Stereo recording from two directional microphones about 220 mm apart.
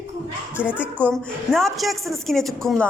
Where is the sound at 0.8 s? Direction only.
Centre (ahead or behind).